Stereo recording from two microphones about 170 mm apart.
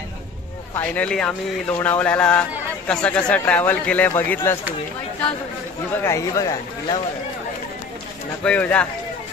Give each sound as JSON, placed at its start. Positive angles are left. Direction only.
{"t": 0.7, "sound": "speech", "side_deg": 5}
{"t": 6.0, "sound": "speech", "side_deg": 20}
{"t": 8.5, "sound": "speech", "side_deg": 10}